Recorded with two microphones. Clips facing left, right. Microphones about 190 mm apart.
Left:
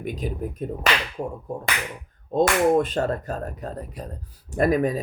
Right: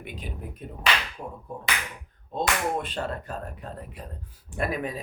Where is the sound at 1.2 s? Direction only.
55° left (ahead or behind).